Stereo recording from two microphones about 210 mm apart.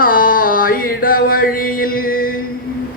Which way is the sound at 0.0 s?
40° left (ahead or behind).